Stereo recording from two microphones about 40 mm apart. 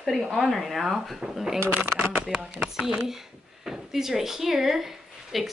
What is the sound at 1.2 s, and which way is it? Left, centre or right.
Speech, centre.